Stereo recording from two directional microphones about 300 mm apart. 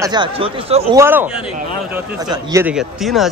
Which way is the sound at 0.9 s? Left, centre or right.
Centre.